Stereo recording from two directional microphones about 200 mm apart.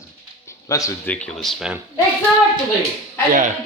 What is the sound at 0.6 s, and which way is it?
Speech, 15° left (ahead or behind).